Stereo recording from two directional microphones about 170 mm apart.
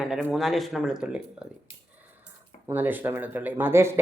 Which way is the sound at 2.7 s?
10° right (ahead or behind).